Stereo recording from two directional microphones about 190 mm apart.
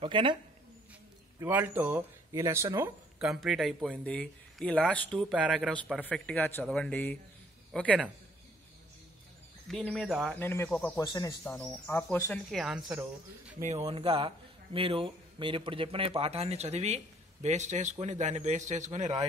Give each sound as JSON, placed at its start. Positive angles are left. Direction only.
{"t": 0.0, "sound": "a man's voice", "side_deg": -25}
{"t": 1.4, "sound": "speech", "side_deg": -15}
{"t": 3.3, "sound": "speech", "side_deg": 0}
{"t": 5.3, "sound": "speech", "side_deg": -5}
{"t": 5.9, "sound": "speech", "side_deg": 5}
{"t": 9.7, "sound": "speech", "side_deg": 0}
{"t": 13.8, "sound": "a man's voice", "side_deg": -30}